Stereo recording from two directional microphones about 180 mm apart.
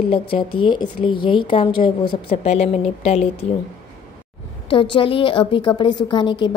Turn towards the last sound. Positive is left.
turn(degrees=25)  # may be behind; listen again after turning